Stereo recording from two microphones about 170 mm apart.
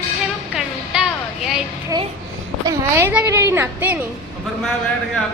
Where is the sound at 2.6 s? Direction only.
15° right (ahead or behind).